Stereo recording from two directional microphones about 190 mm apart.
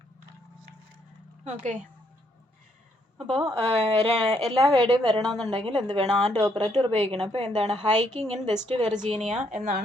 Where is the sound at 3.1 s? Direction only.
30° right (ahead or behind).